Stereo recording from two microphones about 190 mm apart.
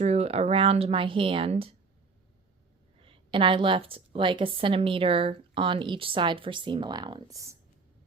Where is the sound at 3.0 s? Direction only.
25° right (ahead or behind).